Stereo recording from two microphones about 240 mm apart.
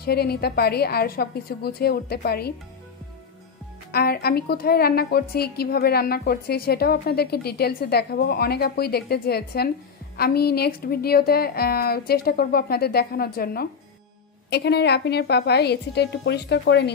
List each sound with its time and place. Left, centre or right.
0.0 s a woman's voice: left
3.9 s a woman's voice: left